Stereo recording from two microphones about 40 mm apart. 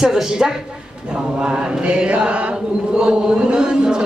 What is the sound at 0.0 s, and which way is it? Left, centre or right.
Speech, centre.